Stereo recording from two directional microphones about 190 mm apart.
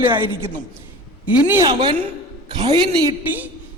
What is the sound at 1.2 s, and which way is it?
Speech, 10° right (ahead or behind).